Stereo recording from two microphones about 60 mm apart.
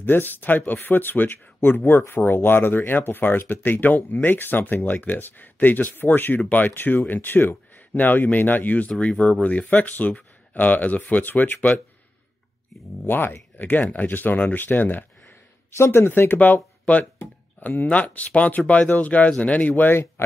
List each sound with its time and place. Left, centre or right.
0.0 s speech: left
13.0 s speech: left
15.8 s speech: left